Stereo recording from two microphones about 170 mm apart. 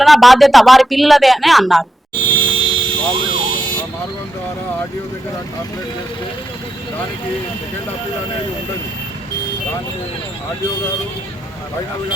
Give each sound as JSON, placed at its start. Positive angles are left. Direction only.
{"t": 0.0, "sound": "speech", "side_deg": 0}
{"t": 2.4, "sound": "vehicle", "side_deg": -30}